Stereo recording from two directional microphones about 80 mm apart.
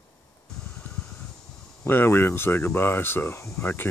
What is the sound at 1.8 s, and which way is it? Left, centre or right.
Speech, left.